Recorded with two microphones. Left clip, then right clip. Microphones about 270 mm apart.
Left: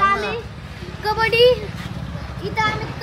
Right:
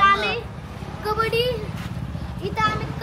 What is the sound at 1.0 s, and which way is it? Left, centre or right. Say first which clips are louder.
Speech: left 7 dB; left.